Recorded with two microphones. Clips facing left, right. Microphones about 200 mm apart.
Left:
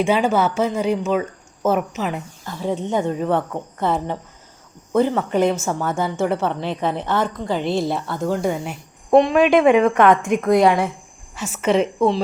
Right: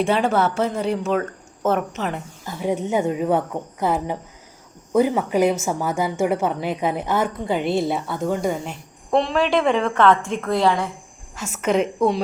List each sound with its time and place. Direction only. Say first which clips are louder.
0.0 s speech: left 1 dB; 5° left (ahead or behind)
2.4 s a woman's voice: right 1 dB; 10° right (ahead or behind)
9.1 s a woman's voice: left 5 dB; 15° left (ahead or behind)
11.3 s speech: left 2 dB; 5° left (ahead or behind)